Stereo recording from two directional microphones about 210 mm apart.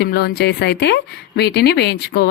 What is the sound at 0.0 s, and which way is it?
Speech, 50° left (ahead or behind).